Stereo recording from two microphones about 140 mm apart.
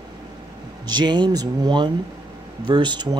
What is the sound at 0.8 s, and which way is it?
Speech, 30° right (ahead or behind).